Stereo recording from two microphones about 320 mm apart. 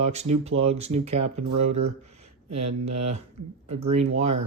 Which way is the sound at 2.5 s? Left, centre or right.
Right.